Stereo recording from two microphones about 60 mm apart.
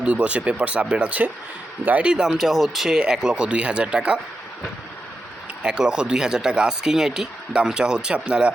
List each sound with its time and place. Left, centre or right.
0.0 s speech: centre
2.0 s speech: centre
5.6 s speech: centre